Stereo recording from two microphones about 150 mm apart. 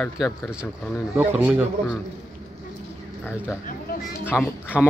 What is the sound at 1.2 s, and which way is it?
Speech, 15° right (ahead or behind).